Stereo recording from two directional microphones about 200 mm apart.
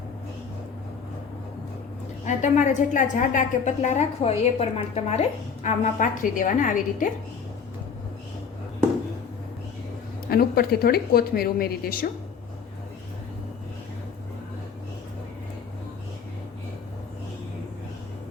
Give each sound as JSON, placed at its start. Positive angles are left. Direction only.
{"t": 2.2, "sound": "a woman's voice", "side_deg": 40}
{"t": 10.2, "sound": "speech", "side_deg": 50}